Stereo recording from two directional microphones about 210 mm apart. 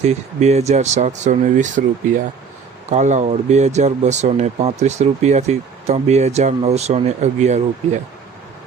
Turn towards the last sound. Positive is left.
turn(degrees=-35)  # may be behind; listen again after turning